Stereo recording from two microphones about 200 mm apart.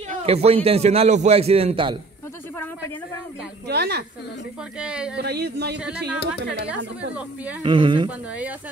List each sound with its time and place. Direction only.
0.2 s a man's voice: 30° right (ahead or behind)
3.6 s a woman's voice: 55° right (ahead or behind)
4.7 s speech: 5° right (ahead or behind)
5.1 s a woman's voice: 55° right (ahead or behind)
7.6 s a woman's voice: 25° right (ahead or behind)